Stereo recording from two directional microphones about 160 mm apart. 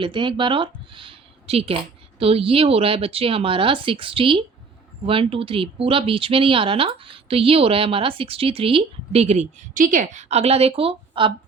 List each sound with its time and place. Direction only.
0.0 s speech: 30° right (ahead or behind)